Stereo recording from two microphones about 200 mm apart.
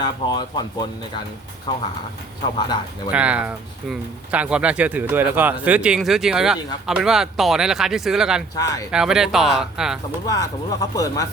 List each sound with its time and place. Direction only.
0.0 s speech: 20° left (ahead or behind)
3.1 s speech: 5° right (ahead or behind)
8.5 s speech: 15° left (ahead or behind)
8.9 s speech: 5° right (ahead or behind)
10.2 s speech: 15° left (ahead or behind)